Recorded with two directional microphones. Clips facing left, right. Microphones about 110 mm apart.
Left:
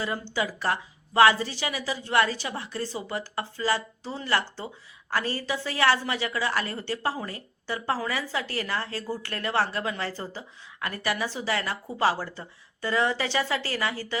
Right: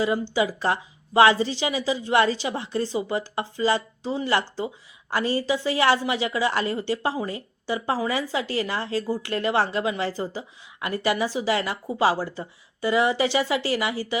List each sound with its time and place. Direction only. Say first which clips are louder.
0.3 s a woman's voice: right 1 dB; 20° right (ahead or behind)